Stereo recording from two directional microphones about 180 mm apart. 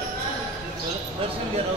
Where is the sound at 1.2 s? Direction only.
30° right (ahead or behind).